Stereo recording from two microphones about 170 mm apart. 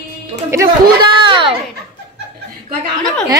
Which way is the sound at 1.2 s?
30° right (ahead or behind).